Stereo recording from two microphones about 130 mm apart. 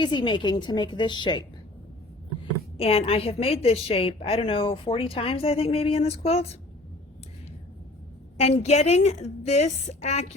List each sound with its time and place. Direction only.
0.0 s a woman's voice: 35° left (ahead or behind)
2.7 s a woman's voice: 50° left (ahead or behind)
8.4 s a woman's voice: 60° left (ahead or behind)